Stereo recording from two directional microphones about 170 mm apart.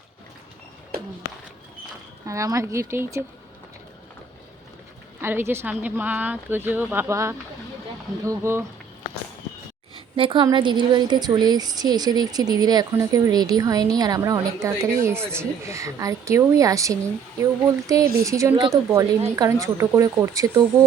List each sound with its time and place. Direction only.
2.2 s a woman's voice: 20° right (ahead or behind)
5.2 s a woman's voice: 15° right (ahead or behind)
10.2 s a woman's voice: 30° right (ahead or behind)